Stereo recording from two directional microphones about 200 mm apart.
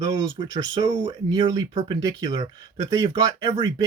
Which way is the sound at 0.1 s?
20° right (ahead or behind).